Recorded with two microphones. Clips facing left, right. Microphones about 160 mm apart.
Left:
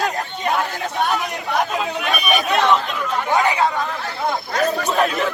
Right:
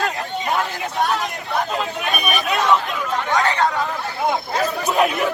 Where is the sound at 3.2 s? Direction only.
15° left (ahead or behind).